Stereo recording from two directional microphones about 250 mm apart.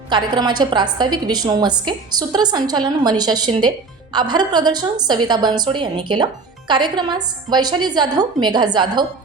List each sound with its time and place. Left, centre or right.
0.1 s a woman's voice: centre